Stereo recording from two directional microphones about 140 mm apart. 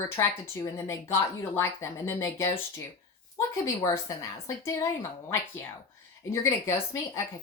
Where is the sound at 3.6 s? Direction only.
25° left (ahead or behind).